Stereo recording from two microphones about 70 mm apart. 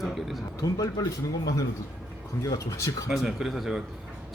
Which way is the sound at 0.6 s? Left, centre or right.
Left.